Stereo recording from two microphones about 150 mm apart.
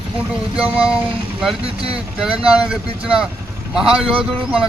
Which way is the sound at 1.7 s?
40° right (ahead or behind).